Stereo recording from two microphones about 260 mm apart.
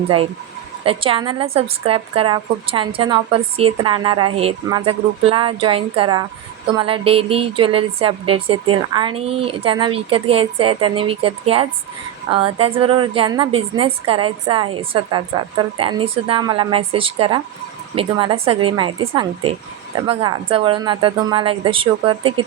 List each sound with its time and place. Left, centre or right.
0.9 s a woman's voice: right